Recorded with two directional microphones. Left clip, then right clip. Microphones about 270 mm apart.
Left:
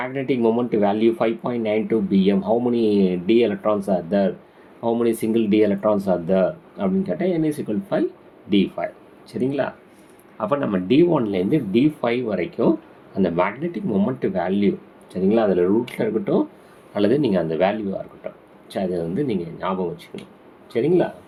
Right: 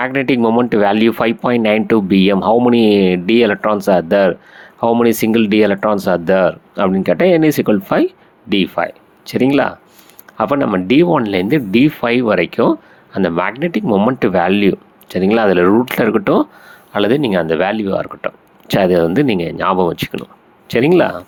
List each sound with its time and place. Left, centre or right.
0.0 s speech: right